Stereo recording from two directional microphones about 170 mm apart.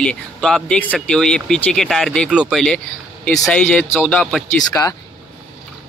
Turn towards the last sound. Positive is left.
turn(degrees=15)  # may be behind; listen again after turning